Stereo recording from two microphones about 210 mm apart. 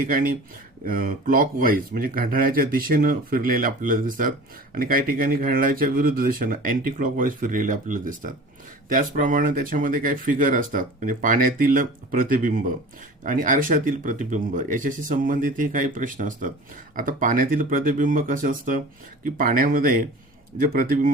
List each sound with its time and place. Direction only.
0.0 s speech: 40° right (ahead or behind)